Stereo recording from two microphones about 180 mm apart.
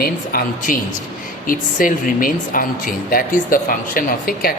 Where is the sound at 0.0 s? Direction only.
55° left (ahead or behind).